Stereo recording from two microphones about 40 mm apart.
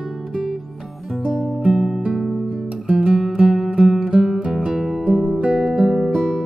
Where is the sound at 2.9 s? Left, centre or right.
Right.